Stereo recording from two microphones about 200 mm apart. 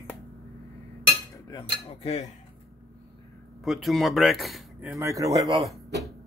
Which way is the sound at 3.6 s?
Centre (ahead or behind).